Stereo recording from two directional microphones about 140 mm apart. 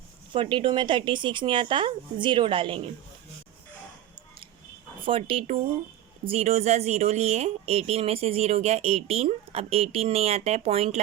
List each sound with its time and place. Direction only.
0.3 s speech: 35° right (ahead or behind)
5.0 s speech: 40° right (ahead or behind)